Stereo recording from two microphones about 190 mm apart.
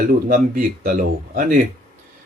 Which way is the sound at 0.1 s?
50° right (ahead or behind).